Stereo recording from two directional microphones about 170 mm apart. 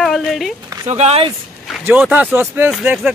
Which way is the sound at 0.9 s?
40° right (ahead or behind).